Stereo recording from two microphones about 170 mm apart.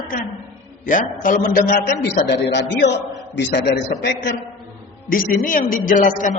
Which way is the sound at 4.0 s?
75° left (ahead or behind).